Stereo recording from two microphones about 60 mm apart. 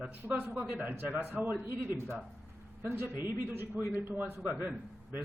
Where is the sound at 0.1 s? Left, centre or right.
Right.